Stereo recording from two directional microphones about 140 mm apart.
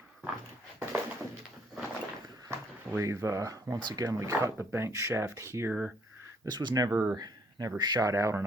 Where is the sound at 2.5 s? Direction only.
20° right (ahead or behind).